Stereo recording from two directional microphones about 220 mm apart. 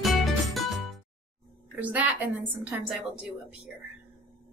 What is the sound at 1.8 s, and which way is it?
A woman's voice, 5° right (ahead or behind).